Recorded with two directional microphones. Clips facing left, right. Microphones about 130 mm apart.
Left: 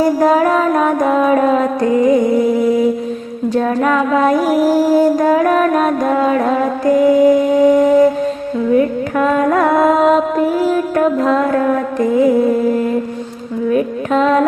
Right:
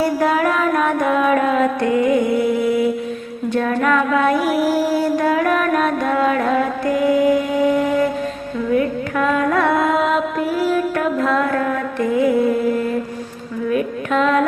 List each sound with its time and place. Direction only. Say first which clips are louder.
0.0 s a sound: left 5 dB; 40° left (ahead or behind)
3.5 s music: left 3 dB; 35° left (ahead or behind)
13.7 s carnatic music: left 4 dB; 35° left (ahead or behind)